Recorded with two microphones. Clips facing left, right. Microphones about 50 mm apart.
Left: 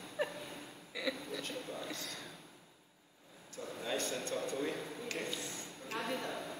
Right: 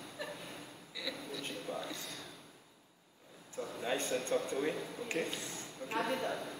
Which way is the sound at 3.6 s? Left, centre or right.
Centre.